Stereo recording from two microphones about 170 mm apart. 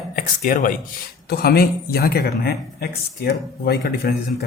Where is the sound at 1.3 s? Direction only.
65° left (ahead or behind).